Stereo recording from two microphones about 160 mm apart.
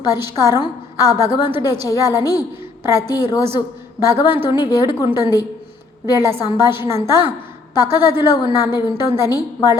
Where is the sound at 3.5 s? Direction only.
25° left (ahead or behind).